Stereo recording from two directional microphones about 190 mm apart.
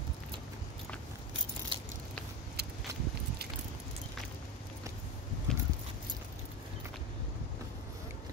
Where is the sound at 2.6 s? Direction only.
55° right (ahead or behind).